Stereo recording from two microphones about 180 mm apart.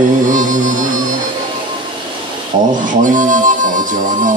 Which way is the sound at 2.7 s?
45° right (ahead or behind).